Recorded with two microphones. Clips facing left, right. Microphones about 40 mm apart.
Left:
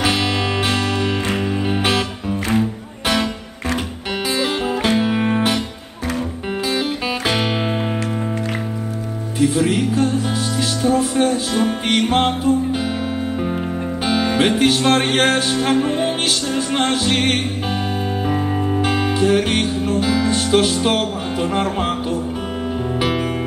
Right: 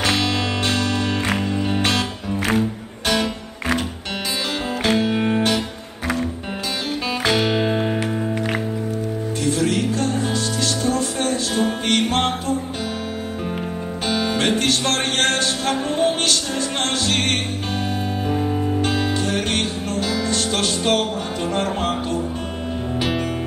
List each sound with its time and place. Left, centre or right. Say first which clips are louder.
0.0 s music: left 2 dB; centre
4.8 s music: even; centre
7.2 s music: right 2 dB; centre
9.4 s music: left 4 dB; centre
14.0 s music: left 3 dB; centre
18.4 s music: left 1 dB; left
18.8 s music: left 3 dB; centre